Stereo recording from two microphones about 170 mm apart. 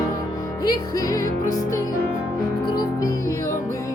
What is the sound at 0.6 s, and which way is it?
Music, 20° left (ahead or behind).